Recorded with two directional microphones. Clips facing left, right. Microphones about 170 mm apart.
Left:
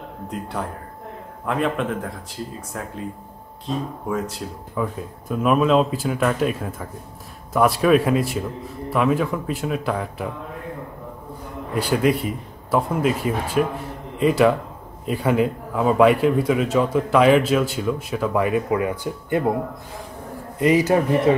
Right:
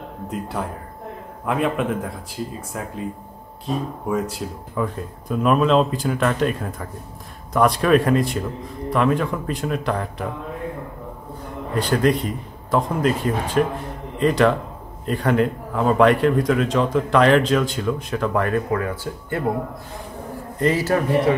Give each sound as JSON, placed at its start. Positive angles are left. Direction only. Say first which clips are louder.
{"t": 0.3, "sound": "speech", "louder": "right 1 dB", "side_deg": -5}
{"t": 3.6, "sound": "speech", "louder": "right 1 dB", "side_deg": -10}
{"t": 4.7, "sound": "speech", "louder": "right 1 dB", "side_deg": 5}
{"t": 11.7, "sound": "a man's voice", "louder": "right 1 dB", "side_deg": 10}
{"t": 20.5, "sound": "a man's voice", "louder": "left 3 dB", "side_deg": 15}